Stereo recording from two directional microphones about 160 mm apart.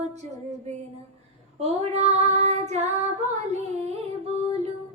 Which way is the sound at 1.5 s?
40° right (ahead or behind).